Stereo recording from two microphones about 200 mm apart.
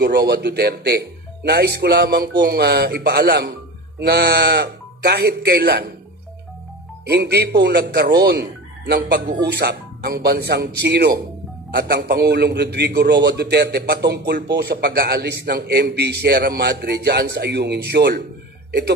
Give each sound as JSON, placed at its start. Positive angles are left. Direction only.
{"t": 0.0, "sound": "a man's voice", "side_deg": -50}
{"t": 7.1, "sound": "a man's voice", "side_deg": -55}